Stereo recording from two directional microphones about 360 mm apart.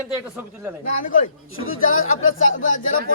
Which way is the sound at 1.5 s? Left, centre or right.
Left.